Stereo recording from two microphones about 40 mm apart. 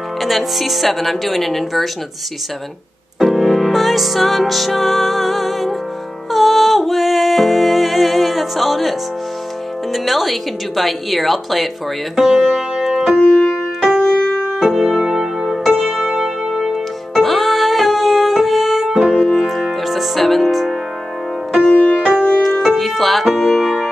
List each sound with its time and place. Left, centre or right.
0.2 s speech: centre
3.2 s music: centre
9.9 s speech: centre
12.2 s music: centre
13.9 s music: left
14.6 s music: centre
17.2 s music: centre
21.7 s music: left
22.4 s music: centre